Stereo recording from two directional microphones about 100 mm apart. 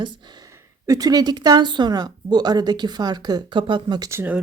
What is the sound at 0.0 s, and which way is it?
Speech, 45° right (ahead or behind).